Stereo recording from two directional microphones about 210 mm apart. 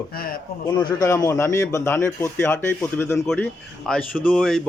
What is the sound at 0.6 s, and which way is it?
A man's voice, 20° left (ahead or behind).